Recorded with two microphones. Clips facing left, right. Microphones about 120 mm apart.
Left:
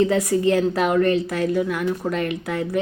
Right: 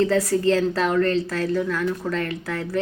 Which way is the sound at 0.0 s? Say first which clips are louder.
Left 1 dB; 15° left (ahead or behind).